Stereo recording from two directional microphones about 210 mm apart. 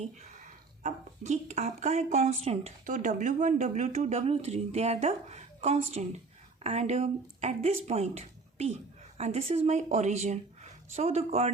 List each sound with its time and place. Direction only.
0.0 s speech: 35° right (ahead or behind)